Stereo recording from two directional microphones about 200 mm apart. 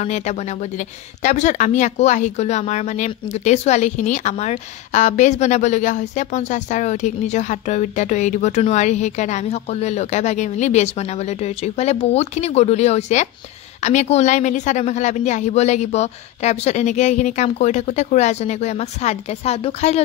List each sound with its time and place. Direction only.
0.0 s speech: 35° left (ahead or behind)